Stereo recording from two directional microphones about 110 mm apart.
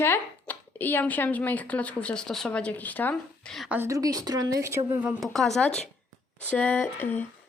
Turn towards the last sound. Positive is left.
turn(degrees=15)  # may be behind; listen again after turning